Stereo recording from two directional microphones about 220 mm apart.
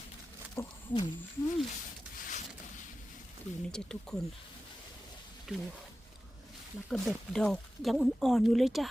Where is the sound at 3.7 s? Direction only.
5° left (ahead or behind).